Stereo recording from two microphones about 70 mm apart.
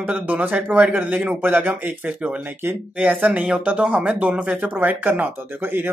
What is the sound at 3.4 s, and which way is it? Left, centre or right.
A man's voice, centre.